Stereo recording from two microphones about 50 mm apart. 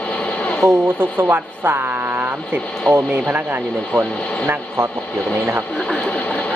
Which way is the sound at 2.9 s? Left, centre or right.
Centre.